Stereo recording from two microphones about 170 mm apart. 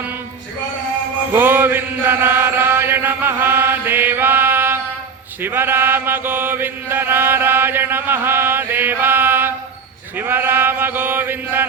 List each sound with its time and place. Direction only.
1.3 s mantra: 10° right (ahead or behind)
5.4 s chant: 10° right (ahead or behind)